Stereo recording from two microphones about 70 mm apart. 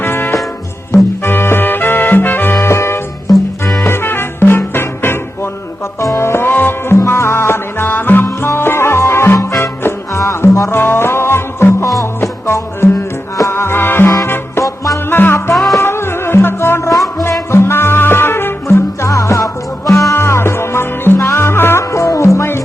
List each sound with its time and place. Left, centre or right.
0.0 s music: left
10.7 s music: left
11.9 s music: left
15.1 s music: left